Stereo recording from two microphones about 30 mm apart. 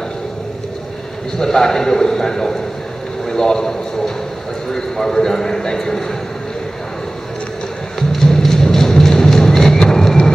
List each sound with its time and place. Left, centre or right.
1.4 s a man's voice: centre
8.4 s music: centre